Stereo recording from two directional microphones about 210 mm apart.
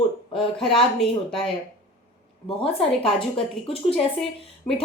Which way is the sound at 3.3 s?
25° left (ahead or behind).